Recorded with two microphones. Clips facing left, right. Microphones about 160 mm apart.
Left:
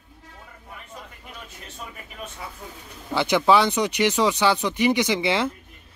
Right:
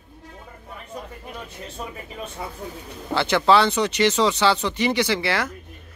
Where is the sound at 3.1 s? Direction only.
15° left (ahead or behind).